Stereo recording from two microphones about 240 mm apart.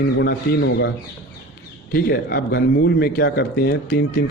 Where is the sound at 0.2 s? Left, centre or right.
Left.